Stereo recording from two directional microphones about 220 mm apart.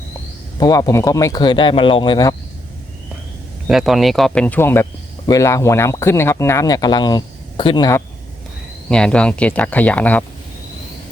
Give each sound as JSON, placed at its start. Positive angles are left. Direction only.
{"t": 0.6, "sound": "speech", "side_deg": 15}
{"t": 3.7, "sound": "speech", "side_deg": 0}
{"t": 8.9, "sound": "speech", "side_deg": 5}